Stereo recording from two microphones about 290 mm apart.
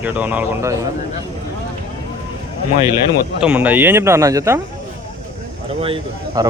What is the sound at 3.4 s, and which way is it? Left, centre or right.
Speech, centre.